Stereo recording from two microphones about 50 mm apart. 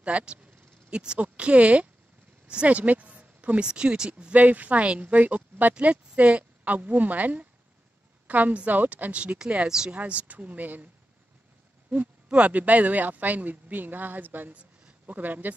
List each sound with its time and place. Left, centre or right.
0.0 s speech: right
2.4 s a sound: right
3.6 s speech: centre
4.3 s speech: right
11.9 s speech: right
14.5 s a woman's voice: right